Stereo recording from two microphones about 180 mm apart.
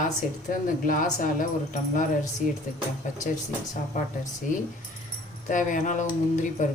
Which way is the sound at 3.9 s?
45° left (ahead or behind).